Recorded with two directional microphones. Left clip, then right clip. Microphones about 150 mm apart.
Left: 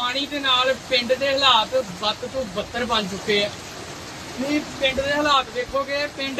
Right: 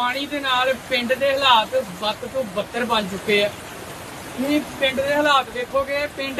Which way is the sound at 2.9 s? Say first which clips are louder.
Right 1 dB; 20° right (ahead or behind).